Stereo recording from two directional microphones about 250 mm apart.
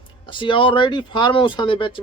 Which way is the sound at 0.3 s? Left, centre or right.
Centre.